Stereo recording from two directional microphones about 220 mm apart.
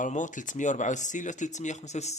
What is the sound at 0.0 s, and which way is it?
Speech, 35° left (ahead or behind).